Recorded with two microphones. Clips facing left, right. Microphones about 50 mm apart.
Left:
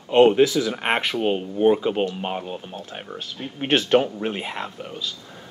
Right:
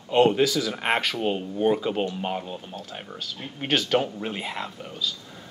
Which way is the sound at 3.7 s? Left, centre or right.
Left.